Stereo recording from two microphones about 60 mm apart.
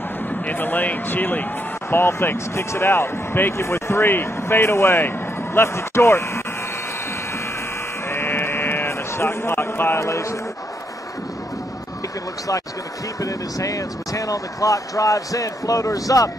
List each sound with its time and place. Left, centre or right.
0.5 s speech: left
1.9 s speech: left
3.5 s speech: left
8.1 s livestock: left
9.9 s speech: left
13.2 s speech: left